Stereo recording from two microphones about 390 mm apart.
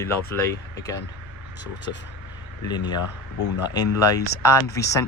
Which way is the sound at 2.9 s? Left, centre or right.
Left.